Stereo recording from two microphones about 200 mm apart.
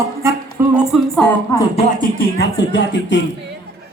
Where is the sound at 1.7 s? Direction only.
45° left (ahead or behind).